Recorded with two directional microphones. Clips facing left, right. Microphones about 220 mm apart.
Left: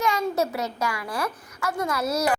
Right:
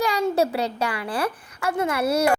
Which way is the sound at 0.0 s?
30° right (ahead or behind).